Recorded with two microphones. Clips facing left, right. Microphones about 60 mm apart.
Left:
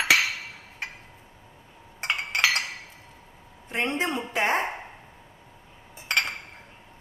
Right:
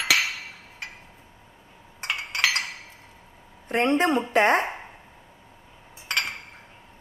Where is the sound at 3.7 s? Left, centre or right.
Right.